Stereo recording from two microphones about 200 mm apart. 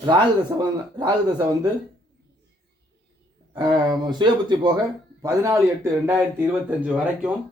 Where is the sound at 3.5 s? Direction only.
20° right (ahead or behind); by 7.3 s 5° right (ahead or behind).